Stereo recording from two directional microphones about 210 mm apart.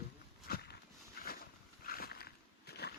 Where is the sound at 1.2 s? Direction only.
45° left (ahead or behind).